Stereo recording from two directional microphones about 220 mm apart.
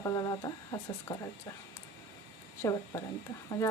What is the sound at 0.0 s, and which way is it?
Speech, 15° left (ahead or behind).